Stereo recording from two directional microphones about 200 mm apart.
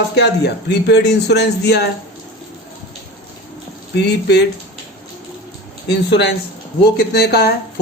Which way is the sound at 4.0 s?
55° left (ahead or behind).